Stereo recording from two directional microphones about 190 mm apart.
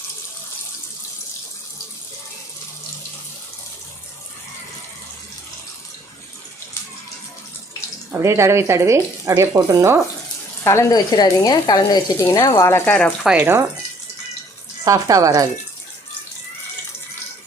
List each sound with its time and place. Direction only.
8.2 s speech: 15° right (ahead or behind)
10.6 s speech: 15° left (ahead or behind)
13.2 s speech: 10° right (ahead or behind)
14.8 s speech: 20° right (ahead or behind)